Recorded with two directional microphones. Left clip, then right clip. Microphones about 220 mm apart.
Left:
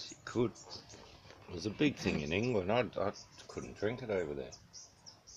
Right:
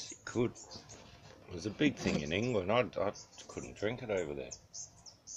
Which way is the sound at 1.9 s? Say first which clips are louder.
Right 1 dB; 15° left (ahead or behind).